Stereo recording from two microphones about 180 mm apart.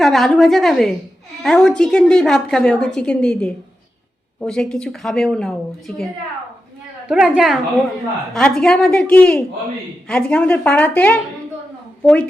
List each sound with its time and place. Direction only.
0.0 s a woman's voice: centre (ahead or behind)
7.1 s a woman's voice: 5° right (ahead or behind)